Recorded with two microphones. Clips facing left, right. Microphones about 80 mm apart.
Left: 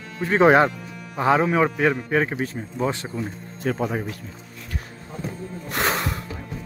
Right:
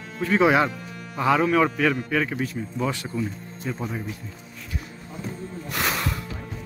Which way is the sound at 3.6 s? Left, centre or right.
Left.